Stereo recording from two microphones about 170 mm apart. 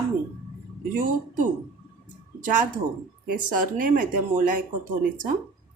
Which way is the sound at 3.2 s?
55° right (ahead or behind).